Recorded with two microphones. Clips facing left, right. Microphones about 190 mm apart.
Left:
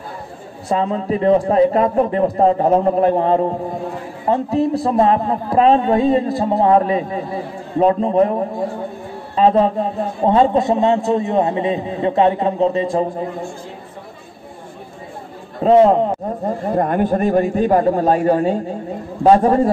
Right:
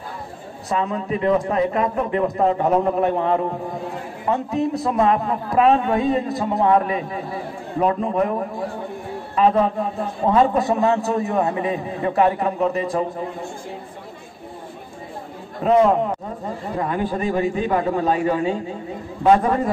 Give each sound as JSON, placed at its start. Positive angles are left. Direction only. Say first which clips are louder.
{"t": 0.7, "sound": "a man's voice", "louder": "left 4 dB", "side_deg": 30}
{"t": 15.6, "sound": "a man's voice", "louder": "left 5 dB", "side_deg": 30}
{"t": 16.4, "sound": "a man's voice", "louder": "left 7 dB", "side_deg": 45}
{"t": 19.2, "sound": "a man's voice", "louder": "left 4 dB", "side_deg": 35}